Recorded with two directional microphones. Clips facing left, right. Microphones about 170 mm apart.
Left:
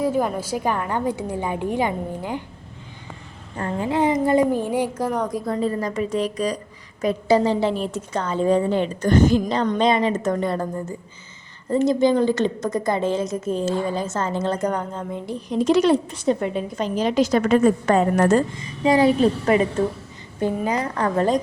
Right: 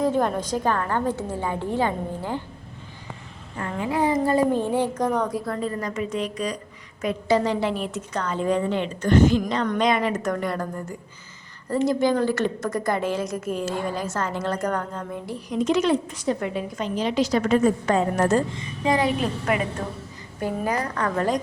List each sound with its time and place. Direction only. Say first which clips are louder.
0.0 s a woman's voice: even; 5° left (ahead or behind)
3.6 s a woman's voice: left 3 dB; 30° left (ahead or behind); by 5.5 s 15° left (ahead or behind)
5.6 s a woman's voice: left 4 dB; 35° left (ahead or behind); by 18.3 s 60° left (ahead or behind)
18.9 s a woman's voice: left 6 dB; 35° left (ahead or behind)
20.4 s a woman's voice: left 3 dB; 25° left (ahead or behind)